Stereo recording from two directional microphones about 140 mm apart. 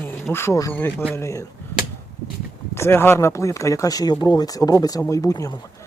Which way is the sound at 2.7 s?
15° left (ahead or behind).